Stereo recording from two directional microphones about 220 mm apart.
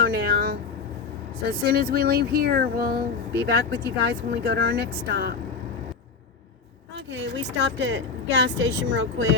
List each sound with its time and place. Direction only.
0.0 s vehicle: 45° right (ahead or behind)
1.5 s speech: 45° right (ahead or behind)
7.8 s speech: 55° right (ahead or behind)